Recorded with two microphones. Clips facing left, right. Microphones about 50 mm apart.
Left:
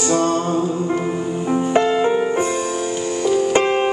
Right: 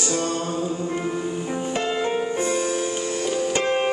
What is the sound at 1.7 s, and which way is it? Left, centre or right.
Music, left.